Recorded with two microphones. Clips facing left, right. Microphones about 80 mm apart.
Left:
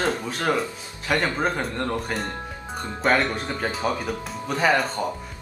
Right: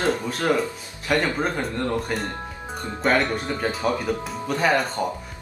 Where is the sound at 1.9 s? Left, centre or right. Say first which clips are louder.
Right 2 dB; centre.